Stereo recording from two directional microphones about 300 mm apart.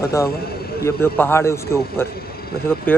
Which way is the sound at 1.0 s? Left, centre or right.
Centre.